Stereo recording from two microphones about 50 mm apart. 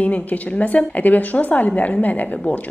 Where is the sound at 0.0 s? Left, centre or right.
Left.